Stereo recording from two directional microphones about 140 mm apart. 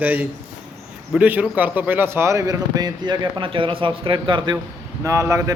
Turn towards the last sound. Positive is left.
turn(degrees=-20)  # may be behind; listen again after turning